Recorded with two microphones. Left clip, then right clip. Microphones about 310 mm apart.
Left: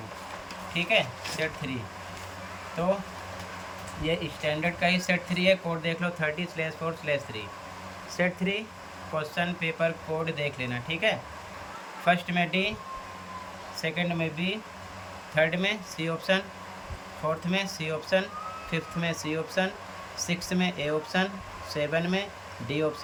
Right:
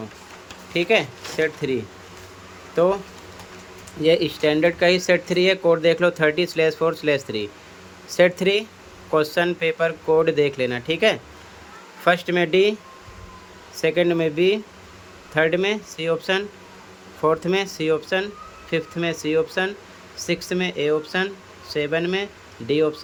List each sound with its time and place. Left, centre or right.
0.7 s speech: centre
4.0 s speech: centre
9.2 s speech: centre
13.7 s speech: centre